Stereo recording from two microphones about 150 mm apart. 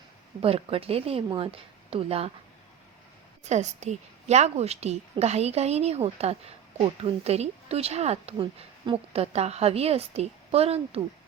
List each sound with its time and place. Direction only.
0.4 s a woman's voice: 40° right (ahead or behind)
3.4 s speech: 50° right (ahead or behind)